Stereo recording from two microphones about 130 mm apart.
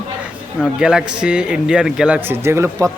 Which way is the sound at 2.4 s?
20° right (ahead or behind).